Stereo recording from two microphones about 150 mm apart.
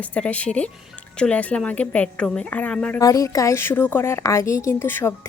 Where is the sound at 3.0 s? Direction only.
20° left (ahead or behind).